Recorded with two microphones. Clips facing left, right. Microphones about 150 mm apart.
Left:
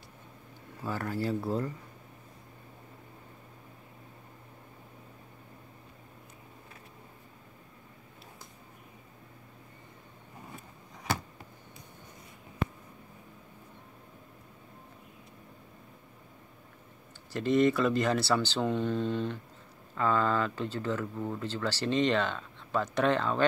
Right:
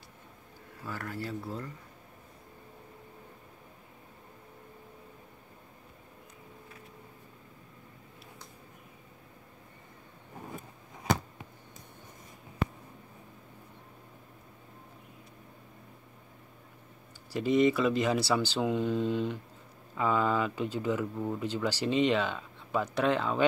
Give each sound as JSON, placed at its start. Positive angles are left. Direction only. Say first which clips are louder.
{"t": 0.8, "sound": "speech", "louder": "left 5 dB", "side_deg": 30}
{"t": 17.3, "sound": "speech", "louder": "even", "side_deg": -5}